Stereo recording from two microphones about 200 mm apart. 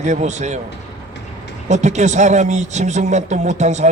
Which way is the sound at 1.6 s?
35° right (ahead or behind).